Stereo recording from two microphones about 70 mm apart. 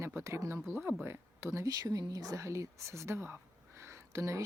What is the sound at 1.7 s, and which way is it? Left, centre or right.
Speech, right.